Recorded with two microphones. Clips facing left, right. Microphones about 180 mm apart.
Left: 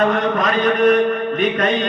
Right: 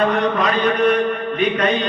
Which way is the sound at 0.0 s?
45° left (ahead or behind).